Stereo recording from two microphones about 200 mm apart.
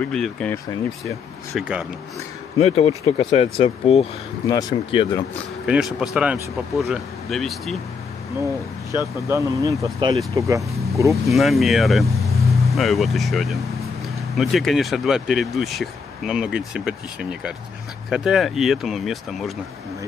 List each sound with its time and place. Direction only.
0.0 s speech: 5° left (ahead or behind)
2.6 s speech: 30° left (ahead or behind)
5.7 s speech: centre (ahead or behind)
8.9 s speech: 15° right (ahead or behind)
11.3 s speech: centre (ahead or behind)